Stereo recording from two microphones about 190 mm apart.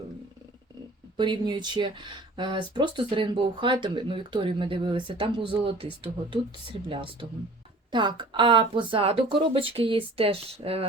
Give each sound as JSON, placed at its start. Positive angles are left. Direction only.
{"t": 1.1, "sound": "speech", "side_deg": -25}